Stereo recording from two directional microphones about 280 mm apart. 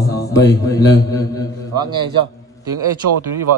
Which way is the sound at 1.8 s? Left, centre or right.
Centre.